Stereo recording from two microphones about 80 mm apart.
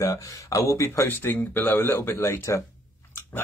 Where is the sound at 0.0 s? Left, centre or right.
Left.